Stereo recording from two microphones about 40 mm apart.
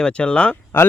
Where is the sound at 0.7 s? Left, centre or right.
Left.